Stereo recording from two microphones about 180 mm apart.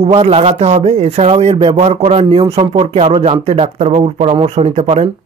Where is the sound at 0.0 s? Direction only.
35° right (ahead or behind).